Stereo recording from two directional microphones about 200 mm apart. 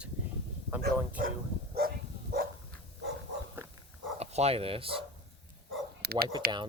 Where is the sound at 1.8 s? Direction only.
45° right (ahead or behind).